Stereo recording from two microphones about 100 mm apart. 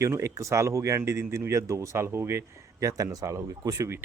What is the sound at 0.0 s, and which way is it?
Speech, 30° right (ahead or behind).